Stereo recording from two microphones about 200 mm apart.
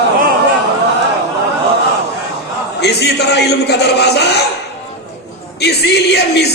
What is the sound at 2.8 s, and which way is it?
A man's voice, 55° left (ahead or behind).